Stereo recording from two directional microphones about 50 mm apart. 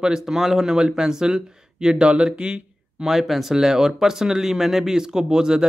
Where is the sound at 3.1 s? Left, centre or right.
Centre.